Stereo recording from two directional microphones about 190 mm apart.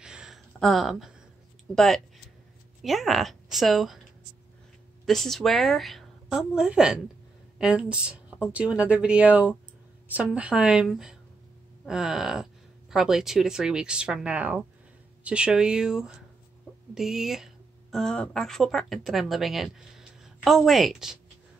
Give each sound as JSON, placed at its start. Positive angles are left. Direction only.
{"t": 0.0, "sound": "a sound", "side_deg": -5}
{"t": 0.5, "sound": "speech", "side_deg": 0}
{"t": 5.0, "sound": "speech", "side_deg": 0}